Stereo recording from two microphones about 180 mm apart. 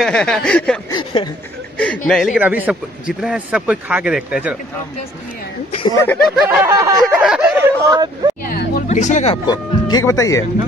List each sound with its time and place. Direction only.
0.0 s a man's voice: 5° left (ahead or behind)
0.9 s speech: 25° left (ahead or behind)
1.8 s a man's voice: 5° left (ahead or behind)
2.3 s a man's voice: 10° right (ahead or behind)
5.8 s speech: 25° left (ahead or behind)
6.0 s a man's voice: 5° left (ahead or behind)
6.6 s a sound: 15° right (ahead or behind)
7.0 s speech: 5° right (ahead or behind); by 8.3 s 20° right (ahead or behind)
8.5 s a sound: 55° left (ahead or behind)
8.8 s speech: 40° left (ahead or behind)
9.5 s speech: 20° left (ahead or behind)